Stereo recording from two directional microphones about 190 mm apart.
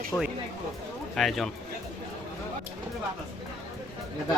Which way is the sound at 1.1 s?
Centre (ahead or behind).